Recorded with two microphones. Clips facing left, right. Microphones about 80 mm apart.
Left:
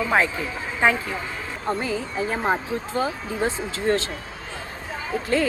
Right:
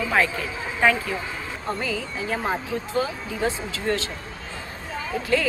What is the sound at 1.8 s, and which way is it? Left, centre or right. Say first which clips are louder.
A woman's voice: left 3 dB; left.